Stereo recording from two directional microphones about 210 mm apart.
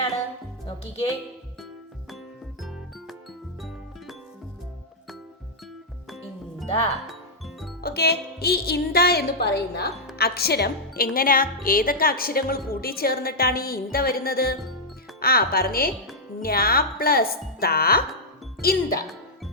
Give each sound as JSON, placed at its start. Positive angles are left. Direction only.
{"t": 2.6, "sound": "music", "side_deg": 0}
{"t": 7.1, "sound": "music", "side_deg": 0}
{"t": 7.8, "sound": "a woman's voice", "side_deg": 50}